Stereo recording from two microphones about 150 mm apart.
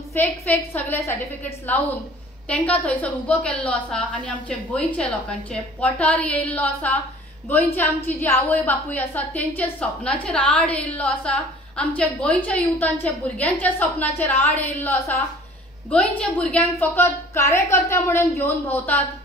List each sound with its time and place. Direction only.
0.7 s a woman's voice: 15° left (ahead or behind)
2.4 s a woman's voice: 10° left (ahead or behind)